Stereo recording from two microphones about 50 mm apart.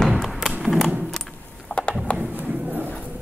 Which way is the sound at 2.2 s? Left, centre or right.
Right.